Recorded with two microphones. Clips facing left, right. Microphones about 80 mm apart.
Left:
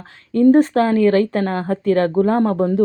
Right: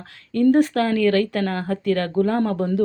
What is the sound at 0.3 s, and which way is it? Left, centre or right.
A woman's voice, left.